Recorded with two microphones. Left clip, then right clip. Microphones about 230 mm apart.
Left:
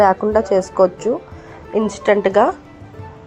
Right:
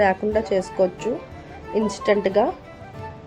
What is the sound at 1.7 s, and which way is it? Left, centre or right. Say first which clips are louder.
Speech: left 5 dB; centre.